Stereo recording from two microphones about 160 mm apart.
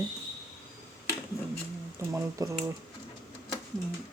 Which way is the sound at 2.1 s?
20° right (ahead or behind).